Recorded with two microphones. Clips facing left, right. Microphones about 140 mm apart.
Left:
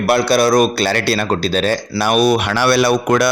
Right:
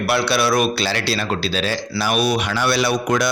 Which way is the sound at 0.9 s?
55° left (ahead or behind).